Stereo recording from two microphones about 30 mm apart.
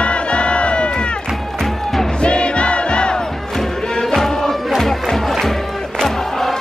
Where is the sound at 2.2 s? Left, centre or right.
Left.